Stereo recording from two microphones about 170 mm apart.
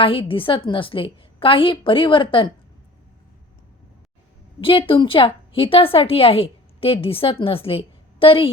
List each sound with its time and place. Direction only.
0.0 s a woman's voice: 30° left (ahead or behind)
4.6 s a woman's voice: 30° left (ahead or behind)